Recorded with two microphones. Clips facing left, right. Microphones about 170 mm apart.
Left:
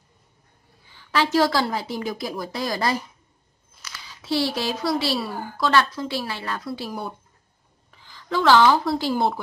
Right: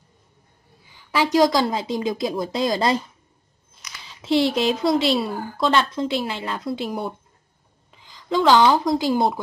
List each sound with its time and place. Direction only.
0.8 s a woman's voice: 15° right (ahead or behind)
4.1 s a woman's voice: 20° right (ahead or behind)